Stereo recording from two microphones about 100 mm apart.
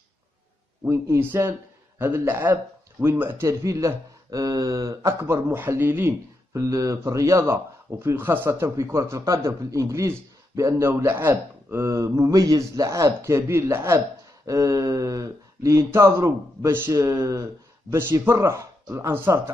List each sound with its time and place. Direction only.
0.8 s speech: 25° right (ahead or behind)
5.2 s speech: 20° right (ahead or behind)